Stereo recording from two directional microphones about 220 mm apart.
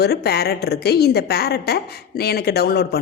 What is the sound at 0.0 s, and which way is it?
A woman's voice, 45° left (ahead or behind).